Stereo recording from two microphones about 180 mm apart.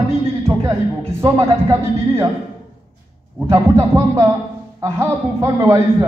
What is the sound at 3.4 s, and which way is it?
Speech, 15° right (ahead or behind).